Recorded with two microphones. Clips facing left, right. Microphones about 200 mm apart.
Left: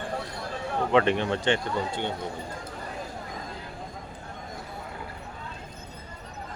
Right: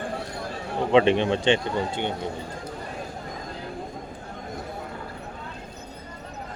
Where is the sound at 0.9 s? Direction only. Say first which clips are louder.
Right 4 dB; 20° right (ahead or behind).